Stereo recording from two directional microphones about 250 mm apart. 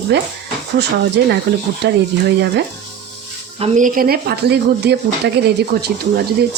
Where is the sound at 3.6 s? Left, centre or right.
Right.